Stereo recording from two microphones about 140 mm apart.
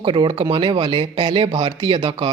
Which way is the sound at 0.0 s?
40° right (ahead or behind).